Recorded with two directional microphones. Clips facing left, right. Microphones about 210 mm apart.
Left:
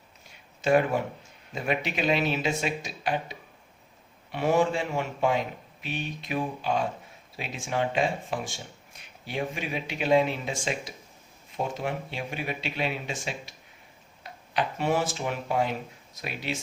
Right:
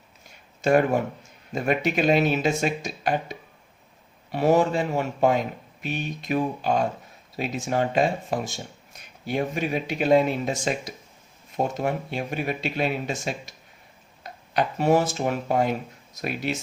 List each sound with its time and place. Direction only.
0.6 s speech: 45° right (ahead or behind)